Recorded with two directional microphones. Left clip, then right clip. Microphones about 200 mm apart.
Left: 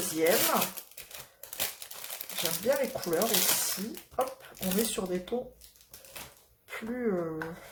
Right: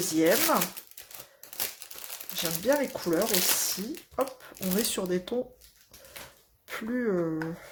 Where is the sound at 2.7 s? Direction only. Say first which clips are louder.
Right 3 dB; 45° right (ahead or behind).